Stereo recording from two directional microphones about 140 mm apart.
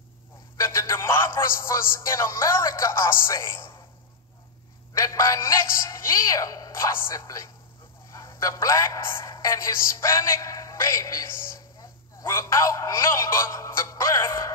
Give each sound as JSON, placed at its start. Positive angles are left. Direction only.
{"t": 0.6, "sound": "a man's voice", "side_deg": 20}
{"t": 5.0, "sound": "a man's voice", "side_deg": 25}